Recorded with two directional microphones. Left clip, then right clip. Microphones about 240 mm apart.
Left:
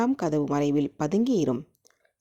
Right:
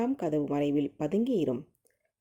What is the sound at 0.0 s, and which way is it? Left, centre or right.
Speech, left.